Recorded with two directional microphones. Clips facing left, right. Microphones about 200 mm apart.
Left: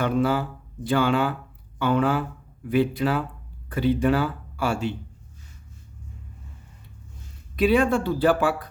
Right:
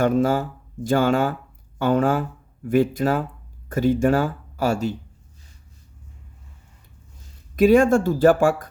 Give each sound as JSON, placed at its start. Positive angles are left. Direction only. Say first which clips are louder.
{"t": 0.0, "sound": "speech", "louder": "right 3 dB", "side_deg": -45}
{"t": 7.5, "sound": "speech", "louder": "right 5 dB", "side_deg": -45}